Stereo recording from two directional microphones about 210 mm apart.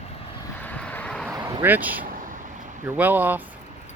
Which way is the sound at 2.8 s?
10° right (ahead or behind).